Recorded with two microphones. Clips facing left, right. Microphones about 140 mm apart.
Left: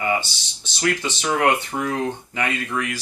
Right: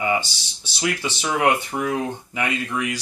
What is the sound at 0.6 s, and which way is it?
Speech, 10° right (ahead or behind).